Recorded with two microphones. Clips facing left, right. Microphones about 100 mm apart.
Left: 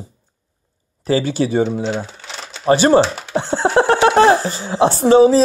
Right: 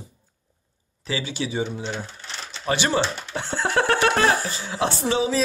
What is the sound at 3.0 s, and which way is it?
Speech, 90° left.